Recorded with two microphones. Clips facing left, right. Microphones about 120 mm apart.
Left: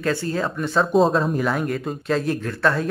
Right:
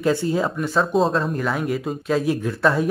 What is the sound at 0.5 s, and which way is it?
Speech, centre (ahead or behind).